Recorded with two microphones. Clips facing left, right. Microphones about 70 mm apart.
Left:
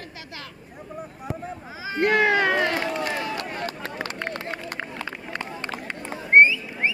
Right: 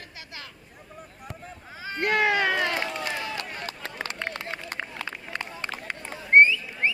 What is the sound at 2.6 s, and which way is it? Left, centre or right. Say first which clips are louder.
Run: left 4 dB; centre.